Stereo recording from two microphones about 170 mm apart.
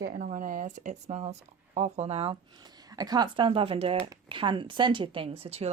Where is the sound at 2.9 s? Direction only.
25° right (ahead or behind).